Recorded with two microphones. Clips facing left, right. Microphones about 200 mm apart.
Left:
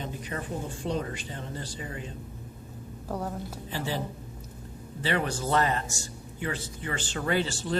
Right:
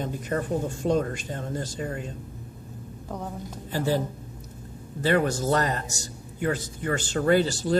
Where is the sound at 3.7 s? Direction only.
40° right (ahead or behind).